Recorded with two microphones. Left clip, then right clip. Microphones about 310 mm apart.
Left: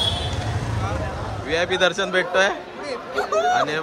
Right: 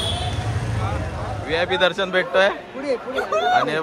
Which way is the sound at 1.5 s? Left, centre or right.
Centre.